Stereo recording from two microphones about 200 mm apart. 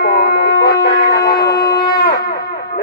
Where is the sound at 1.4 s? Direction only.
20° left (ahead or behind).